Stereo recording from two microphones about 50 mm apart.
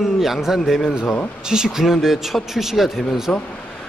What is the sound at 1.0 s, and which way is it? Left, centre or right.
Speech, left.